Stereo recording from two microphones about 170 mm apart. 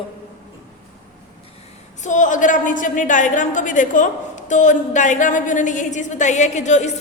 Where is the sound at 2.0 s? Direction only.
45° left (ahead or behind).